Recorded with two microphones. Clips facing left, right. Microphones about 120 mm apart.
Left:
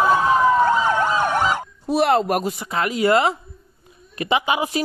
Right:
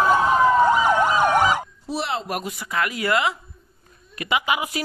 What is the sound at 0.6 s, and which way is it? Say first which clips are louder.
Emergency vehicle: even; 15° right (ahead or behind).